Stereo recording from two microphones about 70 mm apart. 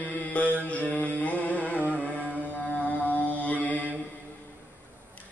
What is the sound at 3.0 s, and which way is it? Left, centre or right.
Mantra, left.